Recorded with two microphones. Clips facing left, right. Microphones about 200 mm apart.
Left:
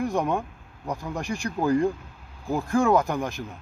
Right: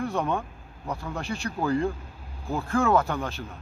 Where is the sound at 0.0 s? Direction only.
15° left (ahead or behind).